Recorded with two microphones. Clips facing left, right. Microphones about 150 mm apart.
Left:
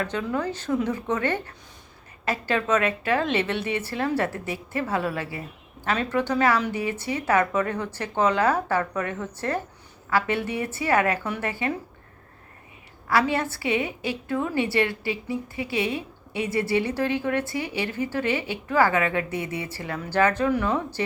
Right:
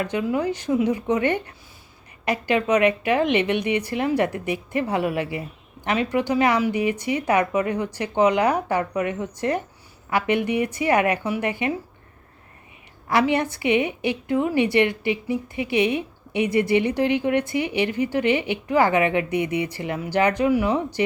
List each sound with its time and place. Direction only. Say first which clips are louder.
0.0 s a woman's voice: right 4 dB; 15° right (ahead or behind)
13.1 s a woman's voice: right 3 dB; 20° right (ahead or behind)